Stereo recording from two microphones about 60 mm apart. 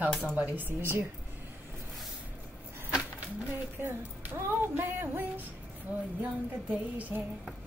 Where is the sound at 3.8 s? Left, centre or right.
Right.